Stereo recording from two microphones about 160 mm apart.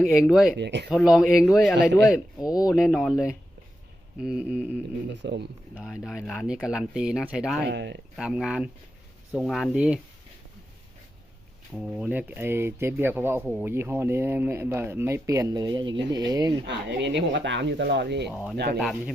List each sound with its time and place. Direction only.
0.0 s speech: centre (ahead or behind)
0.6 s speech: 90° right
0.9 s speech: centre (ahead or behind)
1.7 s speech: 90° right
2.4 s speech: 25° left (ahead or behind)
2.7 s speech: centre (ahead or behind)
5.2 s speech: 90° right
5.7 s speech: 5° right (ahead or behind)
7.6 s speech: 90° right
8.1 s speech: centre (ahead or behind)
11.7 s speech: 5° right (ahead or behind); by 16.6 s 25° right (ahead or behind)
16.6 s speech: 90° right
18.8 s speech: centre (ahead or behind)